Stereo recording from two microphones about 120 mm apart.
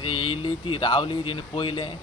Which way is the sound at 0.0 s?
45° left (ahead or behind).